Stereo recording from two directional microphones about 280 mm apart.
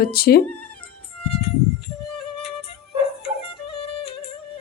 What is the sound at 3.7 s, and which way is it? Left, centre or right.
Music, centre.